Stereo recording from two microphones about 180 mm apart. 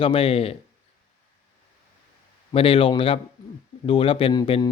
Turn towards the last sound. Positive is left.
turn(degrees=25)  # may be behind; listen again after turning